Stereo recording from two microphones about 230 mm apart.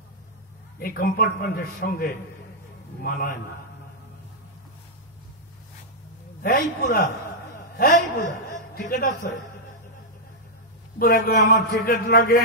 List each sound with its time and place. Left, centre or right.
0.7 s a man's voice: left
6.8 s a man's voice: left
11.0 s a man's voice: left